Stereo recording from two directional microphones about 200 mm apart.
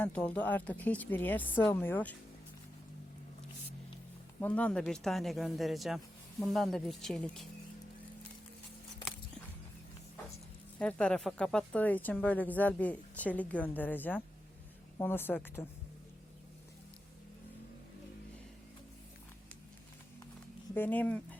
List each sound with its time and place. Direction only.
0.0 s speech: 10° left (ahead or behind)
4.4 s speech: 5° left (ahead or behind)
10.8 s speech: 5° left (ahead or behind)
20.7 s speech: 10° left (ahead or behind)